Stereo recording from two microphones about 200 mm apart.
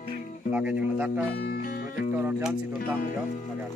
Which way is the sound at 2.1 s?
10° right (ahead or behind).